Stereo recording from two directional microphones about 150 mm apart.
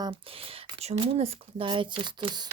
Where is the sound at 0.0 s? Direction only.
35° right (ahead or behind).